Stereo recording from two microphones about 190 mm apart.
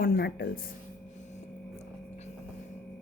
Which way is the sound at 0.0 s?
50° left (ahead or behind).